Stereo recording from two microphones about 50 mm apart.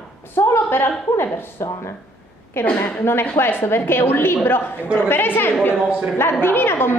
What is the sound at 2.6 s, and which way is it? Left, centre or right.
A woman's voice, left.